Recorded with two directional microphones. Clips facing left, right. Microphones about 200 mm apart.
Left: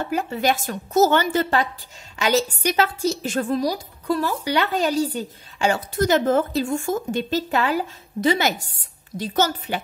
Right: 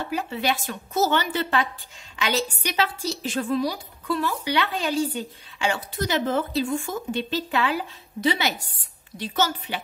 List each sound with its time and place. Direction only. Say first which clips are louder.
0.0 s a woman's voice: left 4 dB; 45° left (ahead or behind)